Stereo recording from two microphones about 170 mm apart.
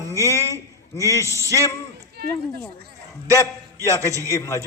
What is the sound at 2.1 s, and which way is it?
Speech, 70° right (ahead or behind).